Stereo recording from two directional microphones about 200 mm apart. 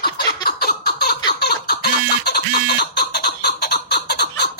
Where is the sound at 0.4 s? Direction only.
50° left (ahead or behind).